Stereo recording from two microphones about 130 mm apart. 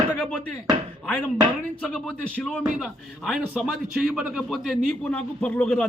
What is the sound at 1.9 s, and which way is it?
A man's voice, 10° left (ahead or behind).